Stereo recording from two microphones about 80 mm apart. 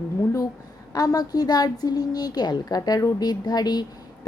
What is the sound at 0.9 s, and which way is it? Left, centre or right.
A woman's voice, left.